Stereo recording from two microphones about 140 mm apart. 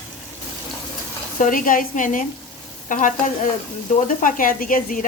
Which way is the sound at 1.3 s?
70° left (ahead or behind).